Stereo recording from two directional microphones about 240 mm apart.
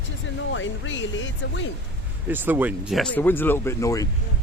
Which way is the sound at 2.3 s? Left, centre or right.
Centre.